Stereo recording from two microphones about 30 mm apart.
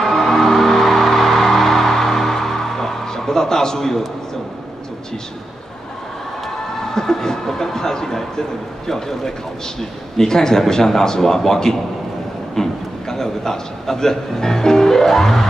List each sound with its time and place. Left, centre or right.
0.0 s music: centre
6.4 s a man's voice: centre